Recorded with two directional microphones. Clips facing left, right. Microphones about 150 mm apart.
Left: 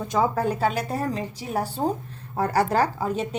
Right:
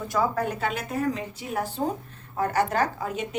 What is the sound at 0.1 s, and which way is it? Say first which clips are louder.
A woman's voice: left 3 dB; 25° left (ahead or behind).